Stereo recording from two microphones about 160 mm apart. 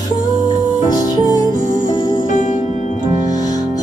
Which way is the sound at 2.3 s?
50° left (ahead or behind).